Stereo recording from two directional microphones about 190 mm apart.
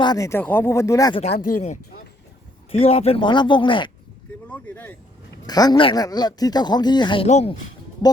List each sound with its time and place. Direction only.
0.0 s speech: 20° left (ahead or behind)
1.5 s speech: 40° left (ahead or behind); by 3.9 s 25° left (ahead or behind)
4.4 s speech: 10° left (ahead or behind)
5.5 s speech: 20° left (ahead or behind)
7.3 s speech: 35° left (ahead or behind)